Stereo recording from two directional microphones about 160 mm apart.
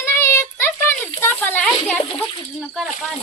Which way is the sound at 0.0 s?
15° left (ahead or behind).